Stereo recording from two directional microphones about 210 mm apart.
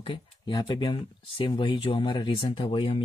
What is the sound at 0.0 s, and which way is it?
Speech, 20° left (ahead or behind).